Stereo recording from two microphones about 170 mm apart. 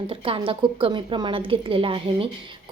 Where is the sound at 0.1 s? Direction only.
30° right (ahead or behind).